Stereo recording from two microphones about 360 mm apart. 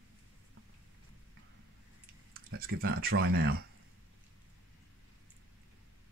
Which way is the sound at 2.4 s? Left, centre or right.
Right.